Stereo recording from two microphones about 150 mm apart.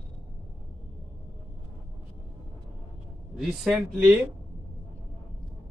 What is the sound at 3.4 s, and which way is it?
Speech, 5° right (ahead or behind).